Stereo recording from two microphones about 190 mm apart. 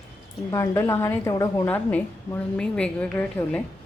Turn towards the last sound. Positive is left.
turn(degrees=10)  # may be behind; listen again after turning